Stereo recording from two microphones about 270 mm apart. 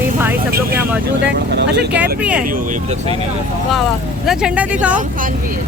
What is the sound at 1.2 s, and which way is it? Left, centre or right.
Speech, right.